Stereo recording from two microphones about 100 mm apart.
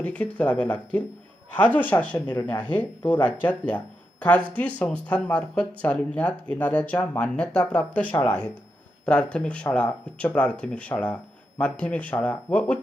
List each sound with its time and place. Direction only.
0.0 s speech: 15° left (ahead or behind)